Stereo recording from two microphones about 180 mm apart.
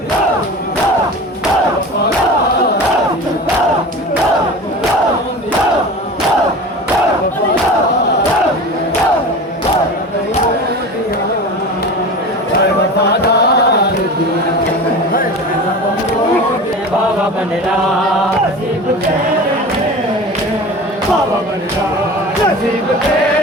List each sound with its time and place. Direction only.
13.2 s music: 65° left (ahead or behind)